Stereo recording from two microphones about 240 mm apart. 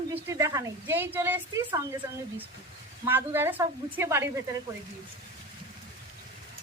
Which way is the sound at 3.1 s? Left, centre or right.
Centre.